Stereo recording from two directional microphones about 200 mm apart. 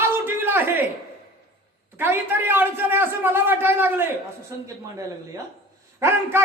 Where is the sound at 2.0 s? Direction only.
10° right (ahead or behind).